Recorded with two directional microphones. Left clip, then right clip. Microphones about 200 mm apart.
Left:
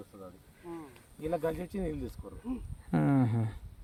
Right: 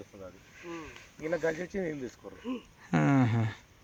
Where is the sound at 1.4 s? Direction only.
65° left (ahead or behind).